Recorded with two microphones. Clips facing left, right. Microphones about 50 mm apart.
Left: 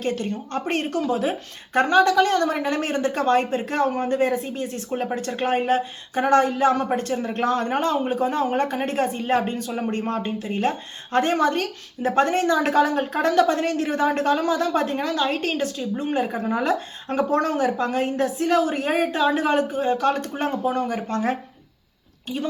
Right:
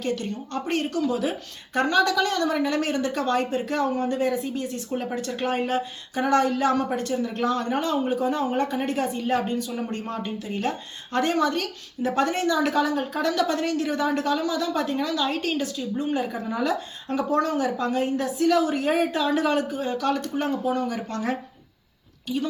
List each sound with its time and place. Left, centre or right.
0.0 s speech: left